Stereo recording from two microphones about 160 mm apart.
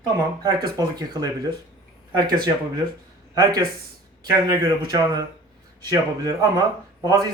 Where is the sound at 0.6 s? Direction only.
25° right (ahead or behind).